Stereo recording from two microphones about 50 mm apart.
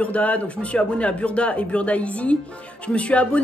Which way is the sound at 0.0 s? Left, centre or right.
Left.